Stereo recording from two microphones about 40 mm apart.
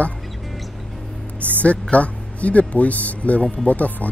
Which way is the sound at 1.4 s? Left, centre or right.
Left.